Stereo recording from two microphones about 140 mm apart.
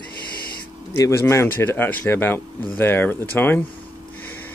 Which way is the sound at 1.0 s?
20° left (ahead or behind).